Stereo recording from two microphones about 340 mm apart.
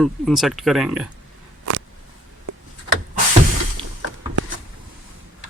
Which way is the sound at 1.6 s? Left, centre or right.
Right.